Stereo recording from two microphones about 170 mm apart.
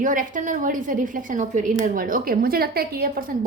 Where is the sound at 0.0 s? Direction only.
50° right (ahead or behind).